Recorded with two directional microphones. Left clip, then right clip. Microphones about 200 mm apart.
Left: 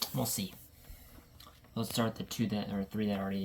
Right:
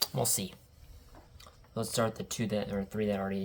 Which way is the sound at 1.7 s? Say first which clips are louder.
Right 3 dB; 50° right (ahead or behind).